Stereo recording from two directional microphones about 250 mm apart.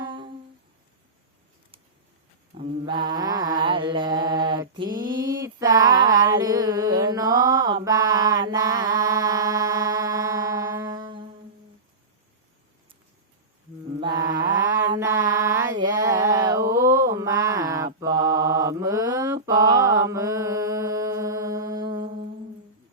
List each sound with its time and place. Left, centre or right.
0.0 s humming: centre
2.6 s mantra: centre
5.3 s a sound: centre
7.4 s mantra: centre
7.9 s music: centre
14.0 s mantra: centre